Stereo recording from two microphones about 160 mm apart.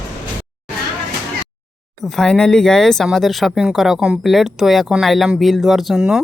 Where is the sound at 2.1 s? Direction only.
5° left (ahead or behind).